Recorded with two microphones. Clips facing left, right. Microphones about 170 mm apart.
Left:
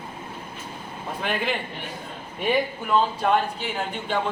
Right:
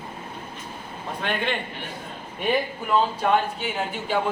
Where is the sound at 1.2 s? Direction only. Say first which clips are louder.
Even; 5° left (ahead or behind).